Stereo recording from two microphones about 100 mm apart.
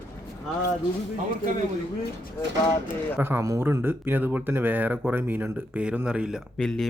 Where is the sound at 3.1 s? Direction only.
20° right (ahead or behind).